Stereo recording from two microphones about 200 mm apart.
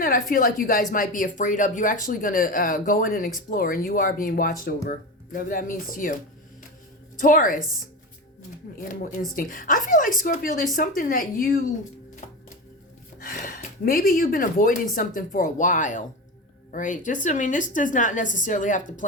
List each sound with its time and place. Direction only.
0.0 s speech: 45° left (ahead or behind)
7.2 s speech: 45° left (ahead or behind)
12.2 s music: 35° left (ahead or behind)
13.1 s a woman's voice: 45° left (ahead or behind)